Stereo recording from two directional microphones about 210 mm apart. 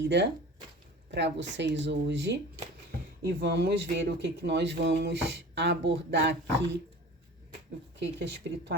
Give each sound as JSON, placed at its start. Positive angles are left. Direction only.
{"t": 0.0, "sound": "speech", "side_deg": -55}
{"t": 3.4, "sound": "speech", "side_deg": -55}
{"t": 7.9, "sound": "speech", "side_deg": -55}